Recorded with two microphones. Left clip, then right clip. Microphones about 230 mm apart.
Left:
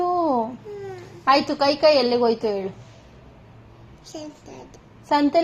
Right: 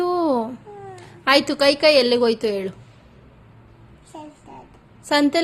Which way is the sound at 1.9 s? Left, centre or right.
Right.